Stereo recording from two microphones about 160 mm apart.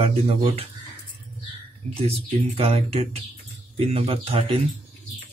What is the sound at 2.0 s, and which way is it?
Speech, 40° right (ahead or behind).